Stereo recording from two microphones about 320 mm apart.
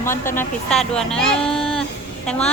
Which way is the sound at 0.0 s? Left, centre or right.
Centre.